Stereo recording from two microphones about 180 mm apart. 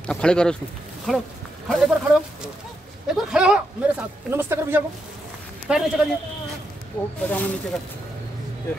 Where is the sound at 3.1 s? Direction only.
5° right (ahead or behind).